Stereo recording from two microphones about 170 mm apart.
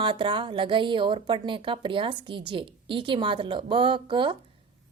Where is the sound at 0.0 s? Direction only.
30° right (ahead or behind).